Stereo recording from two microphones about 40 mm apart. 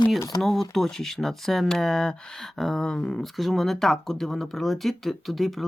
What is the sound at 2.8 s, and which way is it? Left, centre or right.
Speech, centre.